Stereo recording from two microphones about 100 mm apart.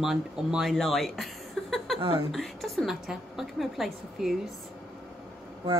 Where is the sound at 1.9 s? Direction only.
60° right (ahead or behind).